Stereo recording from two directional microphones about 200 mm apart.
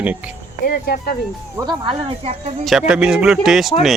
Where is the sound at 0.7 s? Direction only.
50° left (ahead or behind).